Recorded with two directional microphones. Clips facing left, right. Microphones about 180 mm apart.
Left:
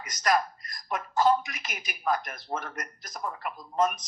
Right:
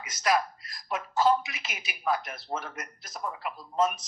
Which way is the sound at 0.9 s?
5° right (ahead or behind).